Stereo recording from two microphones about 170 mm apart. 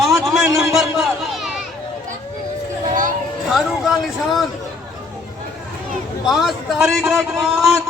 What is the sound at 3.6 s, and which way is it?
Speech, centre (ahead or behind).